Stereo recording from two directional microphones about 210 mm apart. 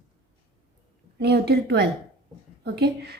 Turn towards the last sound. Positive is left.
turn(degrees=-50)  # may be behind; listen again after turning